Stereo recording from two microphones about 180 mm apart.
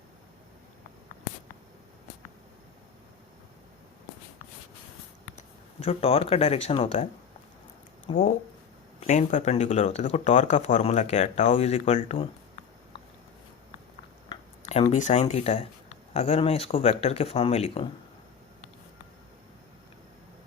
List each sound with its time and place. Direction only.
5.4 s speech: 35° left (ahead or behind)
14.6 s speech: 35° left (ahead or behind)